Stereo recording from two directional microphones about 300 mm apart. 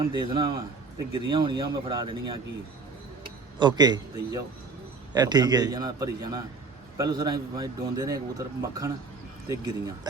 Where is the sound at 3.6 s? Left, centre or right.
Centre.